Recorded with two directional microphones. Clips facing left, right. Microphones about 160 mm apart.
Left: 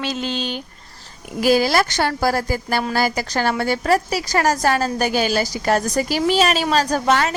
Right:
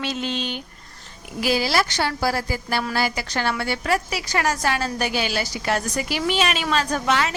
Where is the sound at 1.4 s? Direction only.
45° left (ahead or behind).